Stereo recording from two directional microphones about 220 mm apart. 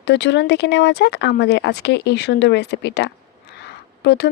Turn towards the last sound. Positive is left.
turn(degrees=50)  # may be behind; listen again after turning